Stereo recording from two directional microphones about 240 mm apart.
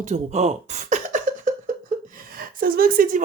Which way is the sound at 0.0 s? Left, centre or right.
Right.